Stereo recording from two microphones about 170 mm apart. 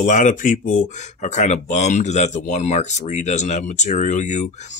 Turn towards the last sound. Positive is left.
turn(degrees=45)  # may be behind; listen again after turning